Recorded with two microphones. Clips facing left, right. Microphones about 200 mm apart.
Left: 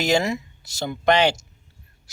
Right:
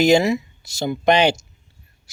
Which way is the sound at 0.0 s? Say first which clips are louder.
Right 6 dB; 10° right (ahead or behind).